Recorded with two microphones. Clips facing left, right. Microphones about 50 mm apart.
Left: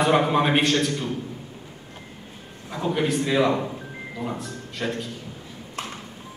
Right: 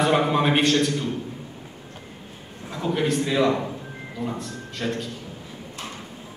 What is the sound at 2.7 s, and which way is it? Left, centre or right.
A man's voice, centre.